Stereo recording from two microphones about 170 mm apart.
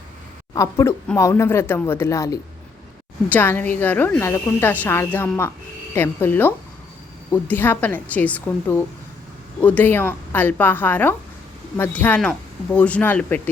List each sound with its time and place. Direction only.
0.5 s a woman's voice: 20° left (ahead or behind)